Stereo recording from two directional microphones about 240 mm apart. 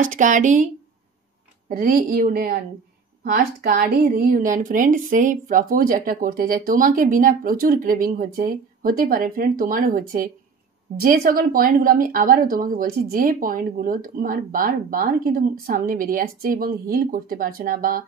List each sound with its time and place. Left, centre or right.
0.1 s speech: right
1.7 s speech: right